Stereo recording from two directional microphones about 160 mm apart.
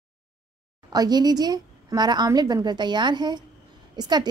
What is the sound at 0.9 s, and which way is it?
A woman's voice, 25° right (ahead or behind).